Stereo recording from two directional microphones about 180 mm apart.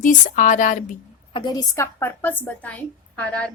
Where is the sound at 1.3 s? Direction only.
25° left (ahead or behind); by 3.5 s 10° left (ahead or behind).